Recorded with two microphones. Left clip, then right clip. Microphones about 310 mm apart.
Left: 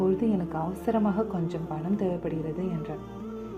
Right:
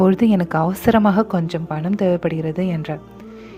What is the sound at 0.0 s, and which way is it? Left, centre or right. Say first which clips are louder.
A woman's voice: right 10 dB; right.